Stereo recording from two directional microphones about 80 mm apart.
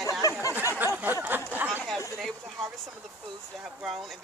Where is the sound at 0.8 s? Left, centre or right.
Right.